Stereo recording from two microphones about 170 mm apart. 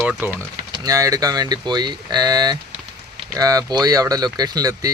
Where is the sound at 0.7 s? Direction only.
20° right (ahead or behind).